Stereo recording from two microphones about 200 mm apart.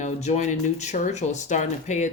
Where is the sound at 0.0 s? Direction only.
35° left (ahead or behind).